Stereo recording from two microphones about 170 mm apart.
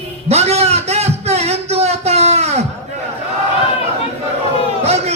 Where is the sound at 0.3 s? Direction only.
40° right (ahead or behind).